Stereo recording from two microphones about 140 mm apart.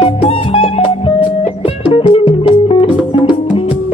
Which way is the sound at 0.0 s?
45° left (ahead or behind).